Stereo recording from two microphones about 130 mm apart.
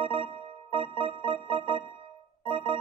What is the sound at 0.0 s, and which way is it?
Music, 45° right (ahead or behind).